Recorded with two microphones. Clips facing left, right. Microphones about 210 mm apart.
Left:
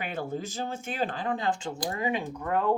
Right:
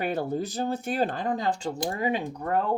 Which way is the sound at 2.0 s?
35° right (ahead or behind).